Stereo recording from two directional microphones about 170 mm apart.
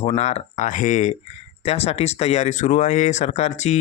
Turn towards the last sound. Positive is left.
turn(degrees=45)  # may be behind; listen again after turning